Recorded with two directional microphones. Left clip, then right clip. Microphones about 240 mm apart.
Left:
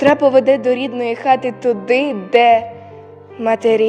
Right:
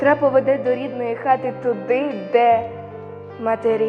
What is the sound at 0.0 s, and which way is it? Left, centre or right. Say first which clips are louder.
A woman's voice: left 4 dB; left.